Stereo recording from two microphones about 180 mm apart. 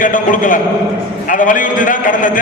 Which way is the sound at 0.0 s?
50° left (ahead or behind).